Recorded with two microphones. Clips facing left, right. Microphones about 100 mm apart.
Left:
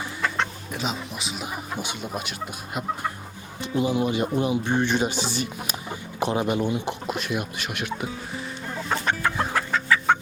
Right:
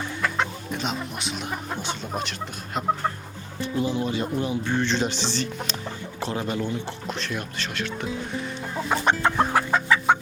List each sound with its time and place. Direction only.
0.2 s chicken: centre (ahead or behind)
1.8 s speech: 10° left (ahead or behind)
3.6 s speech: 15° left (ahead or behind)
9.0 s chicken: 25° right (ahead or behind)